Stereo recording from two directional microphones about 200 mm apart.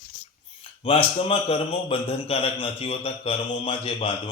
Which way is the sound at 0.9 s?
30° left (ahead or behind).